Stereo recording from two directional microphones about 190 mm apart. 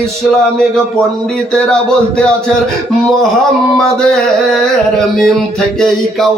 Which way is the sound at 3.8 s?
5° left (ahead or behind).